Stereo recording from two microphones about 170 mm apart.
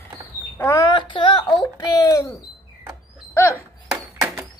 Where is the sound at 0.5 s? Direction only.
15° left (ahead or behind).